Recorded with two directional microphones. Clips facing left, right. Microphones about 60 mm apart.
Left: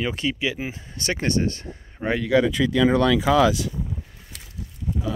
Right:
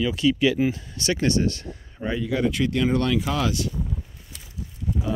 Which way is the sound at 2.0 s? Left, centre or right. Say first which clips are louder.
Left 6 dB; left.